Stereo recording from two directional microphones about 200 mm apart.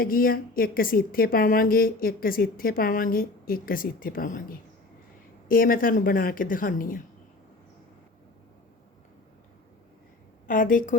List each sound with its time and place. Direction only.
0.0 s speech: 45° left (ahead or behind)
10.4 s a woman's voice: 40° left (ahead or behind)